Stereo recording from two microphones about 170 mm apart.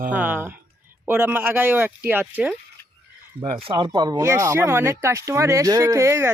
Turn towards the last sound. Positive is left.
turn(degrees=-15)  # may be behind; listen again after turning